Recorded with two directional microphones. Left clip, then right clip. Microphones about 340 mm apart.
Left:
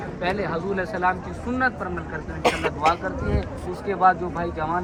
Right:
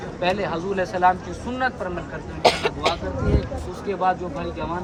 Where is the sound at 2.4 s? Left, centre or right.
Right.